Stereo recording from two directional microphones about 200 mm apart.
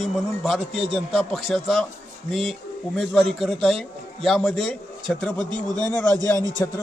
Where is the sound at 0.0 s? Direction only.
Centre (ahead or behind).